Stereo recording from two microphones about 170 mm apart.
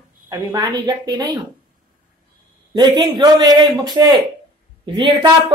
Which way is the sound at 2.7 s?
25° right (ahead or behind).